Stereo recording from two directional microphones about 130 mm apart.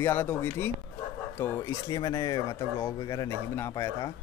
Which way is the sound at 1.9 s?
30° left (ahead or behind).